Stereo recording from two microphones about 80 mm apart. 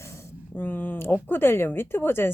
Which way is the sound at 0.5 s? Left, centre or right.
Left.